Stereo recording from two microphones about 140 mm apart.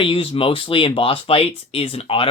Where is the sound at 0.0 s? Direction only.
40° left (ahead or behind).